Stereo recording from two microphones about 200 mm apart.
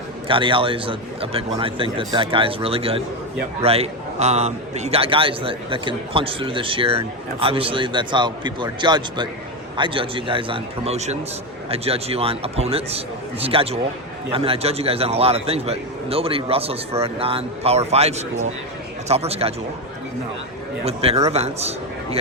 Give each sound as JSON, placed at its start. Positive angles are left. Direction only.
{"t": 0.3, "sound": "a man's voice", "side_deg": -25}
{"t": 20.8, "sound": "a man's voice", "side_deg": -30}